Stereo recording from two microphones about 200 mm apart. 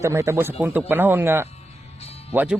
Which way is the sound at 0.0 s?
15° right (ahead or behind).